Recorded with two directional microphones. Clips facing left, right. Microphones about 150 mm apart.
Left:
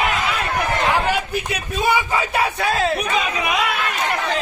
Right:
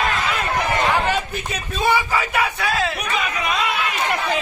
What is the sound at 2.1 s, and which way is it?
Speech, 30° left (ahead or behind).